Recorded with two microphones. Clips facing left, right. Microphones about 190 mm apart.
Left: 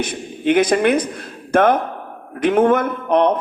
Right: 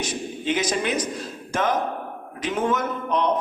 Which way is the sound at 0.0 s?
55° left (ahead or behind).